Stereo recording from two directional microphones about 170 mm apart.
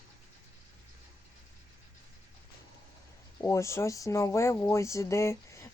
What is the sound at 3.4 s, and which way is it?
Speech, 15° left (ahead or behind).